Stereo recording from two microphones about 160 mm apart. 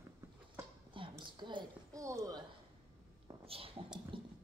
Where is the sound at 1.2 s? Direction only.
30° right (ahead or behind).